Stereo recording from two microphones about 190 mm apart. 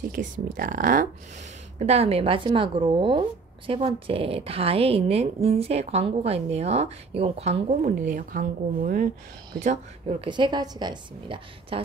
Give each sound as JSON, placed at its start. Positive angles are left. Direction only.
{"t": 0.1, "sound": "speech", "side_deg": -45}
{"t": 1.8, "sound": "speech", "side_deg": -35}
{"t": 10.2, "sound": "a woman's voice", "side_deg": -25}